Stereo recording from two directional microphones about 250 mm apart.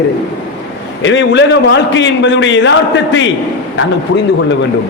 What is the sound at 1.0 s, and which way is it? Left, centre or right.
A man's voice, left.